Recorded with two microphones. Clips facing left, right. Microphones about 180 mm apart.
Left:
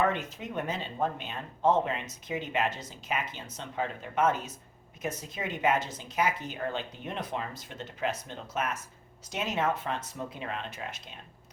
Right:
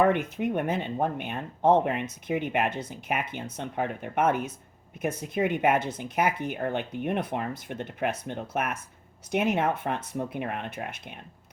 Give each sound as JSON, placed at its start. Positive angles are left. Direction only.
{"t": 0.0, "sound": "speech", "side_deg": -60}